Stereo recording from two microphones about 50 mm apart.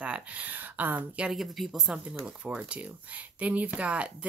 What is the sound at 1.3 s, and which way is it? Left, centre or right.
Speech, centre.